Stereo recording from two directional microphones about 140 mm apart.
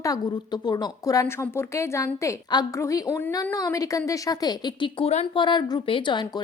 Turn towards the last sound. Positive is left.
turn(degrees=35)  # may be behind; listen again after turning